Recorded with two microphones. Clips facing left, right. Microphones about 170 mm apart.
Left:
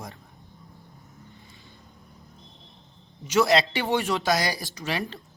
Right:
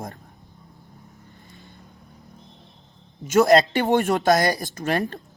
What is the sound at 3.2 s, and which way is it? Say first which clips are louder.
Speech: right 5 dB; 45° right (ahead or behind).